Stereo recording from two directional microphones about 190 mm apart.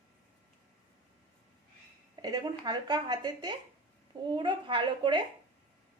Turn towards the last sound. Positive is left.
turn(degrees=-25)  # may be behind; listen again after turning